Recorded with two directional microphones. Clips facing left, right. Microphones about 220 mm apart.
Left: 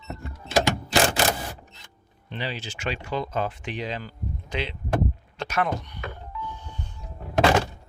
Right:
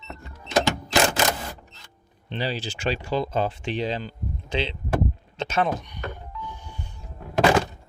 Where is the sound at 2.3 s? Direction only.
35° right (ahead or behind); by 6.0 s 15° right (ahead or behind).